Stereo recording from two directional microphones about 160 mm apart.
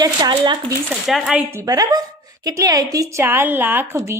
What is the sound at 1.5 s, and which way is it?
A woman's voice, 20° right (ahead or behind).